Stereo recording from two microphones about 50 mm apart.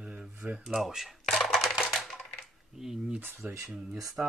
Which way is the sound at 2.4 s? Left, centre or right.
Centre.